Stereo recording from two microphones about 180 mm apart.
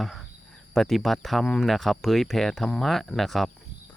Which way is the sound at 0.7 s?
Centre (ahead or behind).